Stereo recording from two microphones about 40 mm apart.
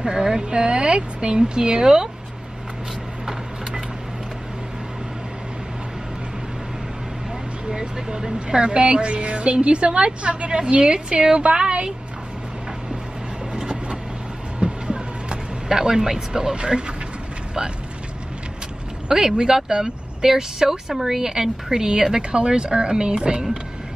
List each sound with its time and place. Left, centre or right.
0.0 s speech: centre
7.7 s speech: centre
14.6 s vehicle: right
16.5 s speech: right
19.0 s speech: centre